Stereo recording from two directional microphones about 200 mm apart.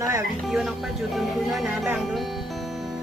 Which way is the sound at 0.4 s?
Centre (ahead or behind).